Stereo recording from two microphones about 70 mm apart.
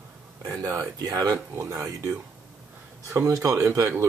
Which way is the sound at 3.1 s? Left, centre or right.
Right.